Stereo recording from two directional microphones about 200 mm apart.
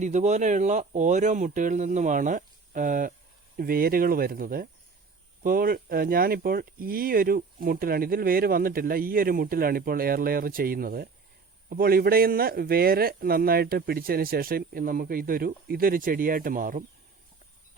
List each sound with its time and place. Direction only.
0.0 s speech: 35° right (ahead or behind)